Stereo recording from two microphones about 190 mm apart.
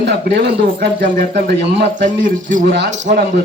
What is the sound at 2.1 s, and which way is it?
A man's voice, 45° right (ahead or behind).